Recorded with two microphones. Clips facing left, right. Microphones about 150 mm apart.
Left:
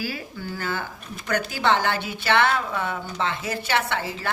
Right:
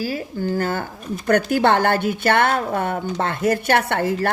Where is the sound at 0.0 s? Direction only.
40° right (ahead or behind).